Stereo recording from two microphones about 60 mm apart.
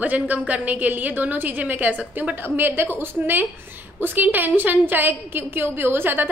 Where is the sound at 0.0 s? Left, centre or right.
Right.